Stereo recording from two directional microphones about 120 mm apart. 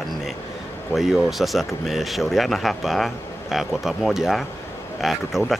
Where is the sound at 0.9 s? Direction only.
Centre (ahead or behind).